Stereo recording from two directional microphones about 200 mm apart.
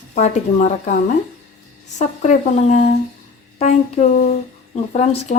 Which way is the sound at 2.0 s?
35° left (ahead or behind).